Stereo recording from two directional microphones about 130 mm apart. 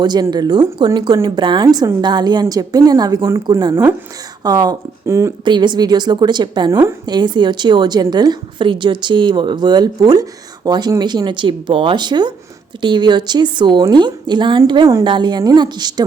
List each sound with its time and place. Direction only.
0.0 s a woman's voice: 30° right (ahead or behind)
5.5 s a woman's voice: 35° right (ahead or behind)